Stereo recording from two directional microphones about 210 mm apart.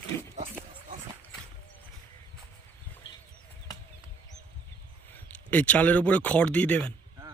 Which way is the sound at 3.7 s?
15° left (ahead or behind).